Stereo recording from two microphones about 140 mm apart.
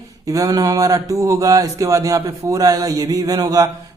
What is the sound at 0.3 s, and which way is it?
Speech, 25° right (ahead or behind).